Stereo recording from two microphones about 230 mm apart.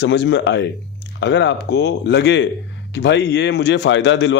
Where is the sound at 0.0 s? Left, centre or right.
Left.